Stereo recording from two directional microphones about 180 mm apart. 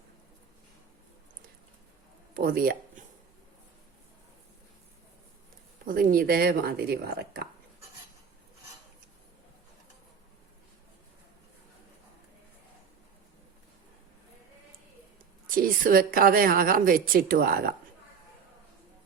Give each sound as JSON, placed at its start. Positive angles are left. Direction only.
{"t": 2.4, "sound": "speech", "side_deg": -55}
{"t": 5.8, "sound": "speech", "side_deg": -50}
{"t": 15.5, "sound": "a woman's voice", "side_deg": -50}